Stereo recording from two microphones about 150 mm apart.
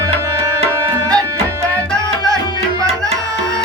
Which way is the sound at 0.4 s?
15° right (ahead or behind).